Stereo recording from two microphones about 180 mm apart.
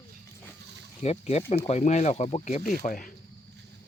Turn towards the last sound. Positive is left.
turn(degrees=45)  # may be behind; listen again after turning